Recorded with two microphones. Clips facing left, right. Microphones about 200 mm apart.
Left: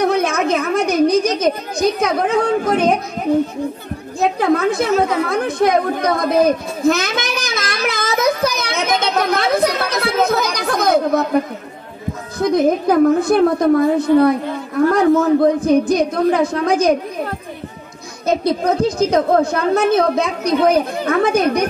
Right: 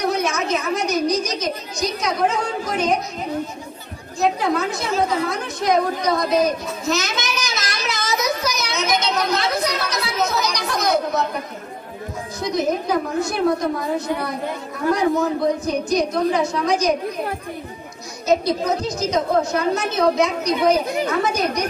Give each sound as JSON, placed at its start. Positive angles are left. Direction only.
{"t": 0.1, "sound": "a sound", "side_deg": 55}
{"t": 4.2, "sound": "chatter", "side_deg": 55}
{"t": 12.4, "sound": "a woman's voice", "side_deg": 55}
{"t": 15.4, "sound": "a woman's voice", "side_deg": 55}
{"t": 18.2, "sound": "a woman's voice", "side_deg": 55}